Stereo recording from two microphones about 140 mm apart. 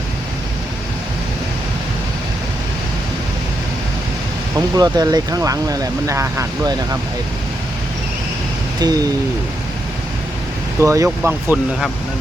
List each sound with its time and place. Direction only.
4.5 s speech: 25° right (ahead or behind)
8.8 s speech: 25° right (ahead or behind)
10.8 s speech: 20° right (ahead or behind)